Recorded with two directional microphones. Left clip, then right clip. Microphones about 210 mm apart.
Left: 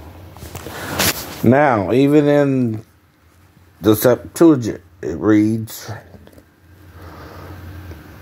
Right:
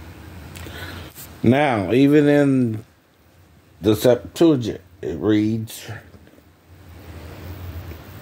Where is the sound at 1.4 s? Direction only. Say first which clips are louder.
Left 4 dB; 5° right (ahead or behind).